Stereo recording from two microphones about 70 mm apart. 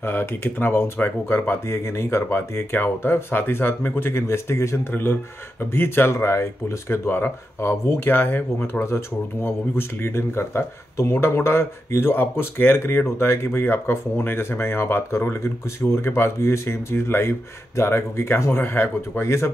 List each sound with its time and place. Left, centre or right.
0.0 s speech: left